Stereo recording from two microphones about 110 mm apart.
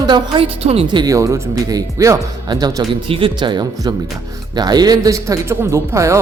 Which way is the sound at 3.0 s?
50° right (ahead or behind).